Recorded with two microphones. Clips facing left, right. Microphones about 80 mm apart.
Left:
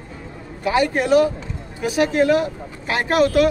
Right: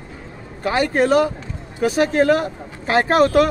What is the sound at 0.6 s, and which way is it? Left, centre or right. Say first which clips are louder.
Speech: right 1 dB; right.